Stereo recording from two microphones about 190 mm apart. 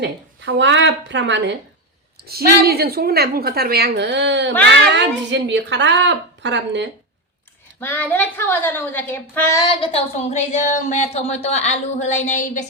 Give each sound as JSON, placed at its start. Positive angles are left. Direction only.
{"t": 0.0, "sound": "speech", "side_deg": -70}
{"t": 2.2, "sound": "a woman's voice", "side_deg": -55}
{"t": 7.8, "sound": "a woman's voice", "side_deg": 10}